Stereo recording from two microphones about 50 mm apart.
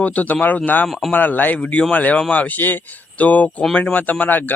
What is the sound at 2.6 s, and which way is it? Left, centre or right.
Speech, left.